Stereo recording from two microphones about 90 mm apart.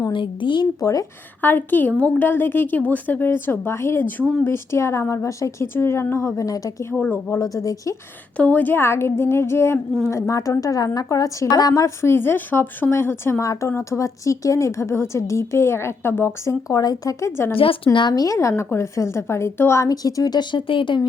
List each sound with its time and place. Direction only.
0.1 s speech: 65° left (ahead or behind)
0.8 s a woman's voice: 35° left (ahead or behind)
1.4 s a woman's voice: 20° left (ahead or behind); by 6.8 s 40° left (ahead or behind)
7.0 s speech: 20° left (ahead or behind)
7.3 s a woman's voice: 40° left (ahead or behind)
8.4 s a woman's voice: 20° left (ahead or behind)
18.1 s a woman's voice: 40° left (ahead or behind); by 21.1 s 60° left (ahead or behind)